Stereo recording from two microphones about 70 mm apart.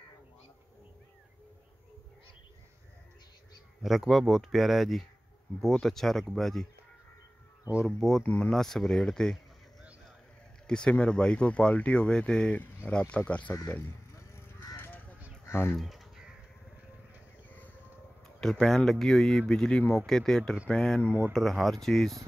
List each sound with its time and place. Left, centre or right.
3.8 s speech: centre
7.8 s speech: centre
8.2 s speech: centre
8.5 s speech: centre
10.7 s speech: centre
12.5 s speech: left
14.8 s honk: left
15.4 s a sound: left
15.8 s crow: centre
18.4 s speech: centre
21.0 s speech: right
21.3 s speech: centre